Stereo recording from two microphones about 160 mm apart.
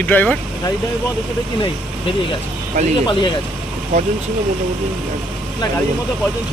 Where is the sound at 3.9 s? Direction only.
40° right (ahead or behind).